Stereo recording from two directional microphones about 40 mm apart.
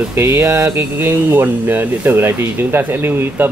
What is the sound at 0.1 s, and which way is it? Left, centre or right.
Speech, right.